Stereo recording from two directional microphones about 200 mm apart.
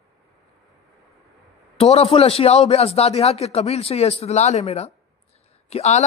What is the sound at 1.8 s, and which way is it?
Speech, 30° left (ahead or behind).